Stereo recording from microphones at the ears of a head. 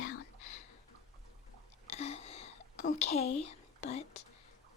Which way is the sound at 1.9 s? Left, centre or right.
Left.